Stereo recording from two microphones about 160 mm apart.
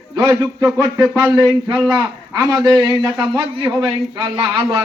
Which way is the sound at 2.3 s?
20° right (ahead or behind).